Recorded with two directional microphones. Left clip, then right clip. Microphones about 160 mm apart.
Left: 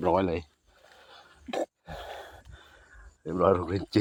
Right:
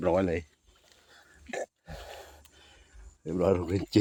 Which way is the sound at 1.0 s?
5° left (ahead or behind).